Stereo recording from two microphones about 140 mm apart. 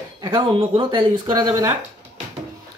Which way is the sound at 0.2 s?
35° right (ahead or behind).